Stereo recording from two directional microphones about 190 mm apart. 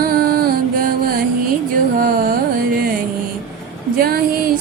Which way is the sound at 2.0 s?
45° right (ahead or behind).